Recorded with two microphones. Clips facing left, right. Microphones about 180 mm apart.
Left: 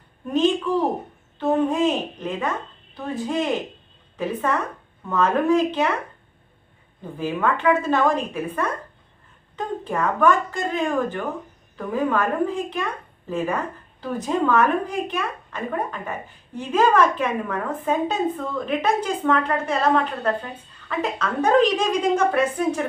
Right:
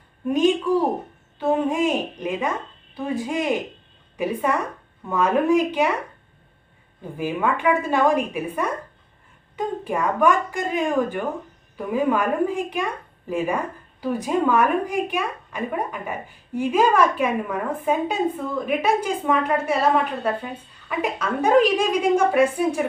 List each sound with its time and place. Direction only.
0.3 s a woman's voice: 10° right (ahead or behind)
7.2 s a woman's voice: 15° right (ahead or behind)